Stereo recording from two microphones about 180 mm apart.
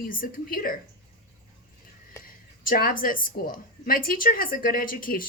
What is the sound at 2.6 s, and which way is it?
A woman's voice, 50° left (ahead or behind).